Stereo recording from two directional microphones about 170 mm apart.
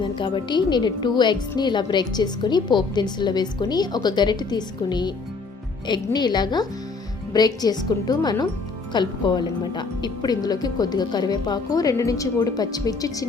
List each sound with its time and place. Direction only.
0.0 s a woman's voice: 30° left (ahead or behind)